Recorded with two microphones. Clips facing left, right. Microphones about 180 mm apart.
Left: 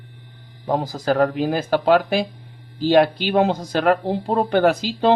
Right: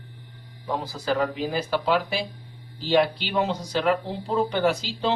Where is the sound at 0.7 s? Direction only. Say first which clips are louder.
Left 6 dB; 45° left (ahead or behind).